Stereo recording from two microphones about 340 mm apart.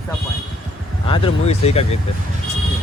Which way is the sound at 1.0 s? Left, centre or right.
Centre.